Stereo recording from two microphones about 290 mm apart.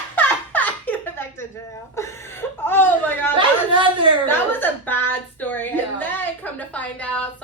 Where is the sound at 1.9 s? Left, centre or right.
Centre.